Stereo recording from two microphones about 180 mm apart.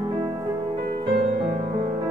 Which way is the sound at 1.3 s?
40° right (ahead or behind).